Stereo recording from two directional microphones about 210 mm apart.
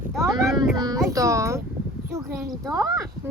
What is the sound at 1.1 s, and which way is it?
Speech, 15° right (ahead or behind).